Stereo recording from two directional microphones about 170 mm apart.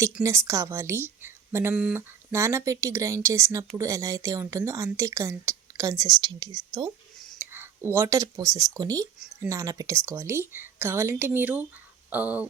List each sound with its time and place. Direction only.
0.2 s speech: 15° right (ahead or behind)
7.2 s whispering: centre (ahead or behind)
7.5 s speech: 15° right (ahead or behind)
9.1 s speech: 5° right (ahead or behind)
9.5 s speech: 20° right (ahead or behind)